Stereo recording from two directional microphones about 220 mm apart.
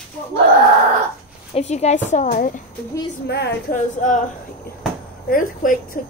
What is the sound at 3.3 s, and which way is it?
Speech, 50° left (ahead or behind).